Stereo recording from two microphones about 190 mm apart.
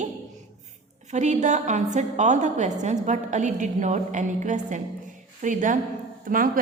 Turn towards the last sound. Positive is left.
turn(degrees=-45)  # may be behind; listen again after turning